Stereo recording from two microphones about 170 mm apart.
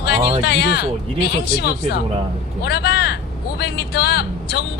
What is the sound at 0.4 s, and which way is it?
Speech, 70° left (ahead or behind).